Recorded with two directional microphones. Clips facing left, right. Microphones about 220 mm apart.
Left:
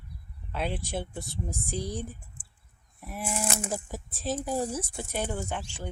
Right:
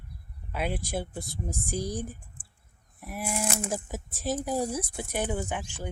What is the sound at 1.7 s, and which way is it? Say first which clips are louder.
Speech: right 2 dB; 45° right (ahead or behind).